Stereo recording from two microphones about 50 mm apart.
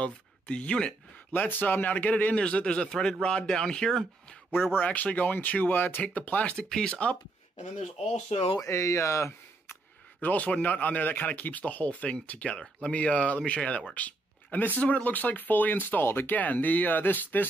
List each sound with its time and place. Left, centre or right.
0.0 s speech: left
1.3 s speech: left
2.3 s speech: left
4.7 s speech: left
6.5 s speech: centre
8.5 s speech: left
10.2 s speech: left
13.9 s a sound: left
14.8 s speech: left
16.3 s speech: left